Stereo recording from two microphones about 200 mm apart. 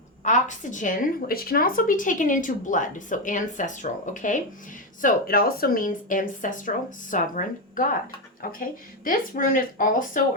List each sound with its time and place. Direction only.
0.3 s a woman's voice: 40° left (ahead or behind)
9.0 s speech: 45° left (ahead or behind)